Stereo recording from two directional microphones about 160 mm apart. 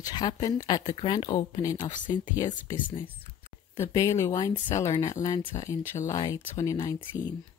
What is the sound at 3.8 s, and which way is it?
Speech, 20° left (ahead or behind).